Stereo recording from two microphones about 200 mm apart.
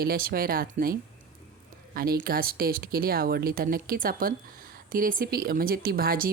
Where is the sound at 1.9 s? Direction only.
50° right (ahead or behind).